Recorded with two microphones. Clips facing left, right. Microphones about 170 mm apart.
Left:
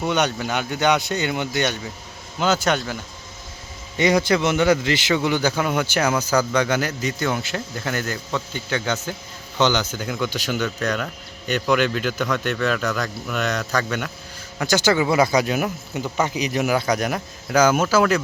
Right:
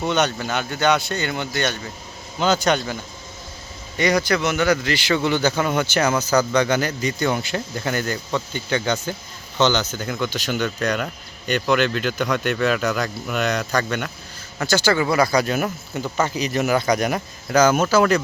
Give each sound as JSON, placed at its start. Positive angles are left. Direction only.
{"t": 0.0, "sound": "a man's voice", "side_deg": 10}
{"t": 2.4, "sound": "speech", "side_deg": 5}
{"t": 3.9, "sound": "a man's voice", "side_deg": 25}
{"t": 14.6, "sound": "a man's voice", "side_deg": 15}
{"t": 16.1, "sound": "a man's voice", "side_deg": 15}